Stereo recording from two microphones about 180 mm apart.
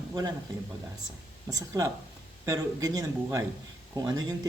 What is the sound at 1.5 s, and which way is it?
Speech, 15° right (ahead or behind).